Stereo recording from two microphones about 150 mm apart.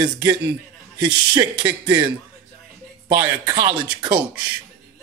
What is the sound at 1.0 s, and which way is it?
Speech, 30° right (ahead or behind).